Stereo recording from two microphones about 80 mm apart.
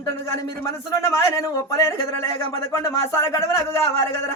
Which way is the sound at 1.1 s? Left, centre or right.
Left.